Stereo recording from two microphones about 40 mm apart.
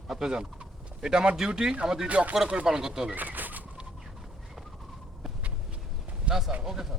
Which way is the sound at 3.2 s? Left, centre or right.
Right.